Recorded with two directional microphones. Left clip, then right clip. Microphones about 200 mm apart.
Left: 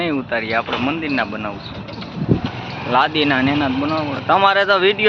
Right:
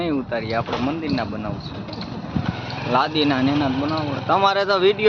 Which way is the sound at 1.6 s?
25° left (ahead or behind).